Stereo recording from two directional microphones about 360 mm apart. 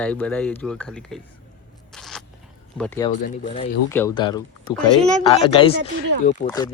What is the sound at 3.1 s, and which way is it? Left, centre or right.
Speech, left.